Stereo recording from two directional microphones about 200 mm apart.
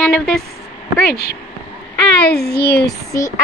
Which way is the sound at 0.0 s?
Centre (ahead or behind).